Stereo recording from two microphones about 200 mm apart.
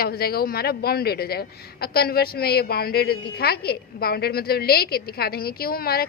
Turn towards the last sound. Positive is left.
turn(degrees=50)  # may be behind; listen again after turning